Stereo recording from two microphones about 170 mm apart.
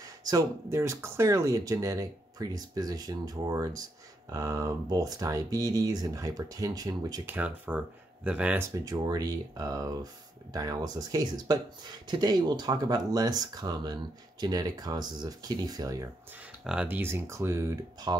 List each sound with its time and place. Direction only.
0.2 s speech: 20° right (ahead or behind)
7.3 s speech: 10° right (ahead or behind)
8.8 s speech: 25° right (ahead or behind)
16.6 s speech: 10° right (ahead or behind)